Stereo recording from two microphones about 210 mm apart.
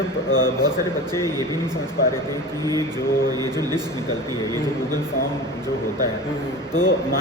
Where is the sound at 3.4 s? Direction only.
20° right (ahead or behind).